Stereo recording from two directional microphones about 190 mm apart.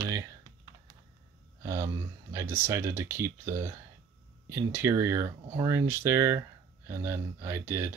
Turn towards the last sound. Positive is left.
turn(degrees=-15)  # may be behind; listen again after turning